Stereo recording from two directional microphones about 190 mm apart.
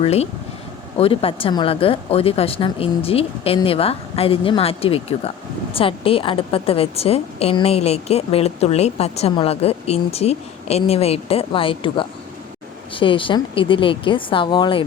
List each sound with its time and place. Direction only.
0.0 s a woman's voice: 35° left (ahead or behind)